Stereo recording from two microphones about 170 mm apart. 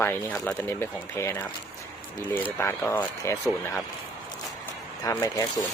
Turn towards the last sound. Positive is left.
turn(degrees=20)  # may be behind; listen again after turning